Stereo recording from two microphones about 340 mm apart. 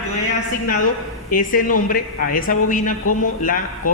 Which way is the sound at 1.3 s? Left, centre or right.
Left.